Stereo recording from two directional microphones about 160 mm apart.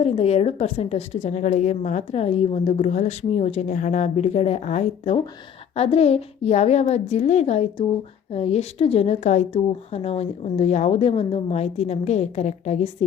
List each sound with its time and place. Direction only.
0.0 s a woman's voice: 40° left (ahead or behind)